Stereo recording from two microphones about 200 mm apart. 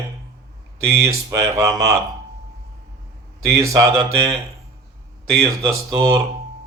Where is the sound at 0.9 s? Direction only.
15° right (ahead or behind).